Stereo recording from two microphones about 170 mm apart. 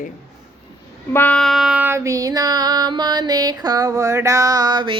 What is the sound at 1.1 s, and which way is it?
Child singing, 10° left (ahead or behind).